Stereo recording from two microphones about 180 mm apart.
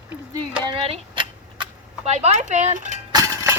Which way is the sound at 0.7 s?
30° right (ahead or behind).